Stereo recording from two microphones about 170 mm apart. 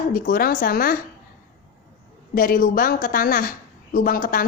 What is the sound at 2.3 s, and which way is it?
A woman's voice, 60° left (ahead or behind).